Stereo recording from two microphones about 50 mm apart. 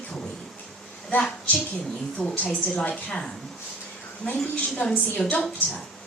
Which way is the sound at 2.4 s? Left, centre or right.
Left.